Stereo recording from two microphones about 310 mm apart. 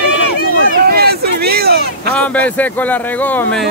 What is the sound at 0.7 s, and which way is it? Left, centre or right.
Speech, right.